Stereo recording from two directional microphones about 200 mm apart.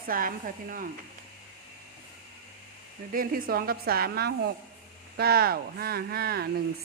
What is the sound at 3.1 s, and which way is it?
A woman's voice, 45° right (ahead or behind).